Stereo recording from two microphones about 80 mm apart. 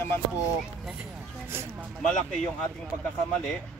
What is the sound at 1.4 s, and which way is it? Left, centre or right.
Speech, right.